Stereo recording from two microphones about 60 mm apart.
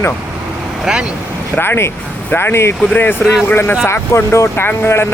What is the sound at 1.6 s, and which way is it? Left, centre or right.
Speech, left.